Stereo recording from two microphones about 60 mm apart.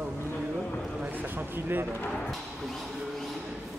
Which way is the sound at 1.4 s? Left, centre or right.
Right.